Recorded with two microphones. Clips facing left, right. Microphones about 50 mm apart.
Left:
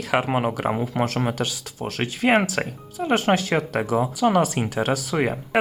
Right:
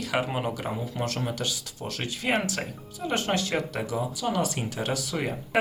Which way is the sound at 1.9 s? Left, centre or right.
Left.